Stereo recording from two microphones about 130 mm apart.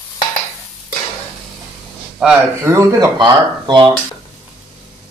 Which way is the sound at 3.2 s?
35° right (ahead or behind).